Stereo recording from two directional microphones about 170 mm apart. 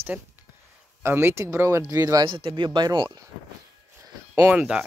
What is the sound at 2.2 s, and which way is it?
Speech, 30° right (ahead or behind).